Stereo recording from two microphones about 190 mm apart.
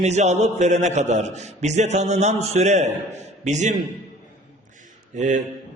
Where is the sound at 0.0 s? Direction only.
35° right (ahead or behind).